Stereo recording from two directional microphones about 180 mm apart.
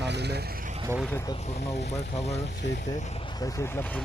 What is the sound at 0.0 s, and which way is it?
Vehicle, 70° right (ahead or behind).